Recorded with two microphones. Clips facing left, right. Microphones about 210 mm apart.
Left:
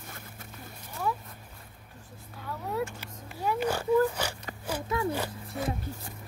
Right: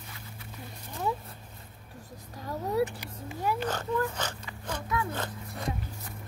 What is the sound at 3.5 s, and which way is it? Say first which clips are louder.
Speech: left 9 dB; 10° left (ahead or behind).